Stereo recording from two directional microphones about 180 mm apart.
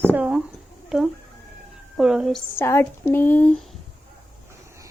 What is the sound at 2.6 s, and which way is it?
A woman's voice, 15° left (ahead or behind).